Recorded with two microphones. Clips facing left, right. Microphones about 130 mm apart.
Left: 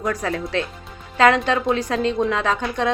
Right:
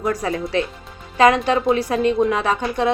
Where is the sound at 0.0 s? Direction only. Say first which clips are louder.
Right 2 dB; 10° right (ahead or behind).